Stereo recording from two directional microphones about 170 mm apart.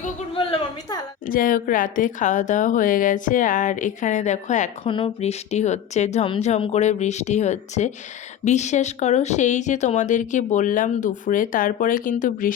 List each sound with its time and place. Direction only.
1.3 s speech: 55° left (ahead or behind)
4.9 s a woman's voice: 30° left (ahead or behind); by 12.5 s 50° left (ahead or behind)